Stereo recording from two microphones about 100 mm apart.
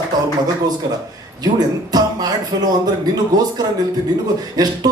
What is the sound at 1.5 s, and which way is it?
Speech, 40° right (ahead or behind).